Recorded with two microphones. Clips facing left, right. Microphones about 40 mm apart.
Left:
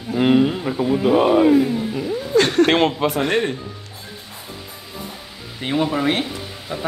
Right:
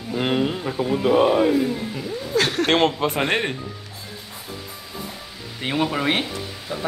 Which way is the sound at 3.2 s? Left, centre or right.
Centre.